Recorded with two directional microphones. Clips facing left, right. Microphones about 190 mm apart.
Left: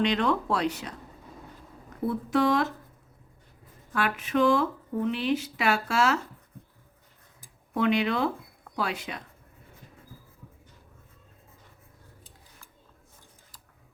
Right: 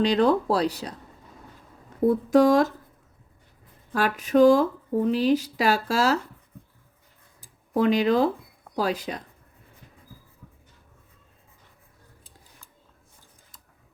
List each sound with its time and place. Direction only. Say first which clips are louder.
0.0 s speech: right 5 dB; 35° right (ahead or behind)
2.0 s speech: right 7 dB; 40° right (ahead or behind)
3.9 s speech: right 6 dB; 40° right (ahead or behind)
7.4 s speech: right 4 dB; 35° right (ahead or behind)